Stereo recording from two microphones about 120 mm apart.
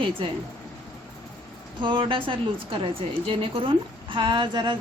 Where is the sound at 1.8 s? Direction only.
45° right (ahead or behind).